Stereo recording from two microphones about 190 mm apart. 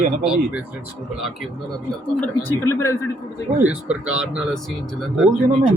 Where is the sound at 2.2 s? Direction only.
10° left (ahead or behind).